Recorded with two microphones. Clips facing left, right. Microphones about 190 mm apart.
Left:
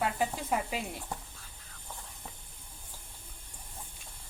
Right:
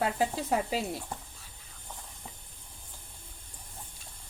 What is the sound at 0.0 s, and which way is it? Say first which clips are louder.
Speech: right 2 dB; 35° right (ahead or behind).